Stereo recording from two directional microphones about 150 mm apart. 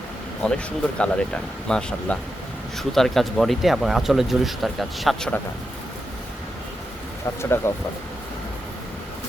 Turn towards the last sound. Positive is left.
turn(degrees=15)  # may be behind; listen again after turning